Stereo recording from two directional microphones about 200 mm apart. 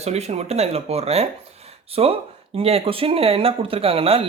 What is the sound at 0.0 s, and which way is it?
Speech, 30° right (ahead or behind).